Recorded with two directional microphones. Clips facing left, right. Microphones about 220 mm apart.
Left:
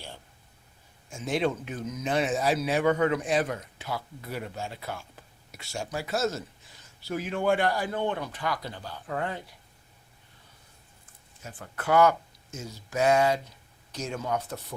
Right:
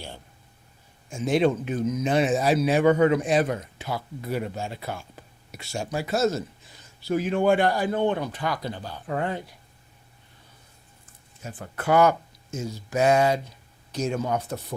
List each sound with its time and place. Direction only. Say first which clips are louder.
1.3 s speech: right 6 dB; 20° right (ahead or behind)
11.8 s speech: right 2 dB; 20° right (ahead or behind)